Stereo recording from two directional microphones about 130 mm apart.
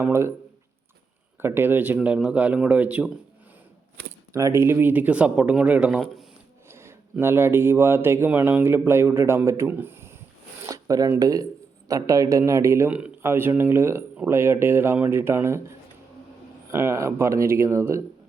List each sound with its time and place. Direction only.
0.0 s speech: 20° right (ahead or behind)
1.4 s speech: 15° right (ahead or behind)
4.3 s speech: 25° right (ahead or behind)
10.7 s a sound: 25° right (ahead or behind)
11.2 s speech: 25° right (ahead or behind)
16.7 s speech: 20° right (ahead or behind)